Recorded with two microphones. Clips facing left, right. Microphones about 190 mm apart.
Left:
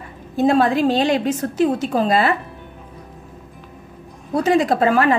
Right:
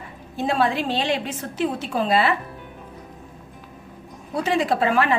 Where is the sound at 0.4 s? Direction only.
45° left (ahead or behind).